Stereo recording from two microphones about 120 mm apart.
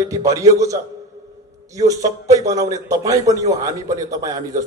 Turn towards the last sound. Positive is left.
turn(degrees=-30)  # may be behind; listen again after turning